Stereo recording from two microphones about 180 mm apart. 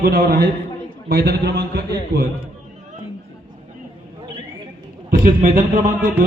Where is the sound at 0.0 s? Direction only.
60° right (ahead or behind).